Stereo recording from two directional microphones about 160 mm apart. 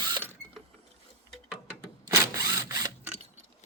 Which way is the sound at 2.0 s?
20° right (ahead or behind).